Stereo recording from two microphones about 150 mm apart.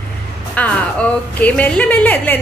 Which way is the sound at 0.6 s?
10° left (ahead or behind).